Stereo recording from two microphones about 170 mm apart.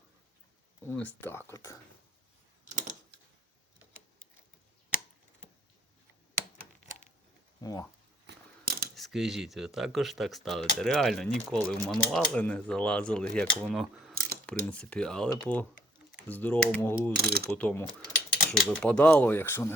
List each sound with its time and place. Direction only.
0.8 s speech: 10° left (ahead or behind)
7.6 s speech: 20° left (ahead or behind)
8.3 s mechanisms: 60° right (ahead or behind)
9.0 s speech: centre (ahead or behind)
17.2 s speech: 65° right (ahead or behind)
17.6 s speech: 10° left (ahead or behind)